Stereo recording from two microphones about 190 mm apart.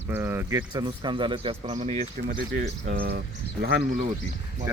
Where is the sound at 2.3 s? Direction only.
50° right (ahead or behind).